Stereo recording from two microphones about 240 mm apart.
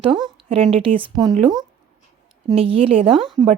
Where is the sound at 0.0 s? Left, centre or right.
Centre.